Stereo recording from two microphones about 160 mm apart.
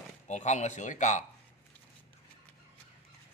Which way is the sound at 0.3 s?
45° left (ahead or behind).